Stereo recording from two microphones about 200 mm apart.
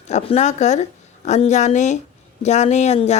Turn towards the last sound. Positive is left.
turn(degrees=35)  # may be behind; listen again after turning